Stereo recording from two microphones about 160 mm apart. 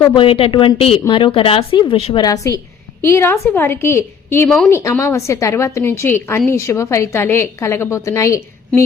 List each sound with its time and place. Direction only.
0.2 s speech: 35° left (ahead or behind)
2.2 s a woman's voice: 20° left (ahead or behind)
4.4 s speech: 5° left (ahead or behind)
4.7 s a woman's voice: 20° left (ahead or behind)